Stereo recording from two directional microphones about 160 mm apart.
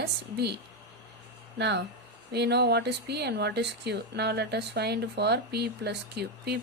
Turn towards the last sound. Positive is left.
turn(degrees=-90)